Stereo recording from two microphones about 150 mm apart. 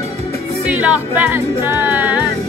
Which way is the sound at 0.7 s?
10° right (ahead or behind).